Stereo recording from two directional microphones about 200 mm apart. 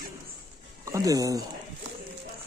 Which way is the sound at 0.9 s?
15° right (ahead or behind).